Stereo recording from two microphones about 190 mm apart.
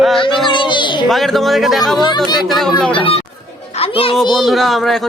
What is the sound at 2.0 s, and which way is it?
Speech, 20° left (ahead or behind).